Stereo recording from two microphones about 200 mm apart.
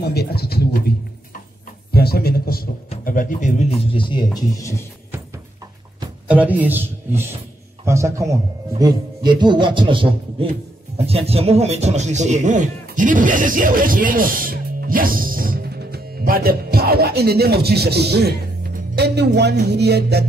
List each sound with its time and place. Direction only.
0.0 s speech: 55° left (ahead or behind)
1.9 s a sound: 50° left (ahead or behind)
3.0 s speech: 45° left (ahead or behind)
3.8 s speech: 25° left (ahead or behind)
6.2 s a man's voice: 5° right (ahead or behind); by 20.2 s 55° right (ahead or behind)